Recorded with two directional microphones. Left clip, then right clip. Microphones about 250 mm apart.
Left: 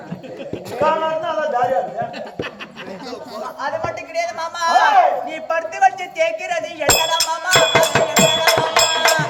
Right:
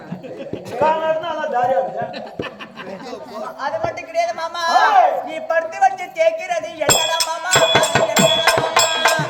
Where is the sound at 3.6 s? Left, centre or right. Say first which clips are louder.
Right 1 dB; centre.